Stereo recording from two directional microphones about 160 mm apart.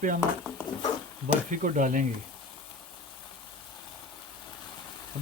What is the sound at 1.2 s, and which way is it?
Speech, 55° right (ahead or behind).